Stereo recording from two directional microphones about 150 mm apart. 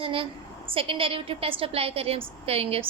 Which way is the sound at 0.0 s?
35° right (ahead or behind).